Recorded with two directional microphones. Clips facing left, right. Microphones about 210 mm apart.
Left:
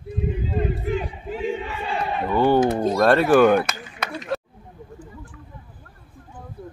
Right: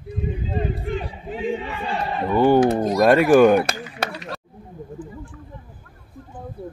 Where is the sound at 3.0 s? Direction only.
15° right (ahead or behind).